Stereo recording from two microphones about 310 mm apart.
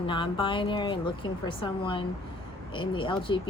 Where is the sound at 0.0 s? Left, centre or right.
Centre.